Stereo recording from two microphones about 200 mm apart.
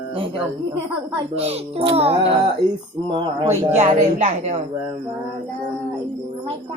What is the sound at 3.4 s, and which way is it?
Speech, 35° right (ahead or behind).